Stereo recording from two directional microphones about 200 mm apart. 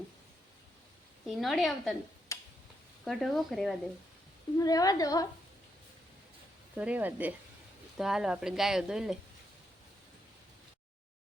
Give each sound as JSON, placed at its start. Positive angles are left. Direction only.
{"t": 1.3, "sound": "speech", "side_deg": 0}
{"t": 2.3, "sound": "a sound", "side_deg": 15}
{"t": 3.0, "sound": "speech", "side_deg": 0}
{"t": 4.5, "sound": "a woman's voice", "side_deg": 20}
{"t": 6.7, "sound": "speech", "side_deg": -5}